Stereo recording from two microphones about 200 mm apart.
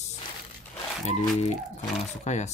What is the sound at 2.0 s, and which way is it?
Speech, 35° left (ahead or behind).